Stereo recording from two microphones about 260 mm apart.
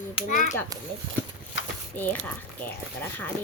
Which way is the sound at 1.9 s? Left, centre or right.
Centre.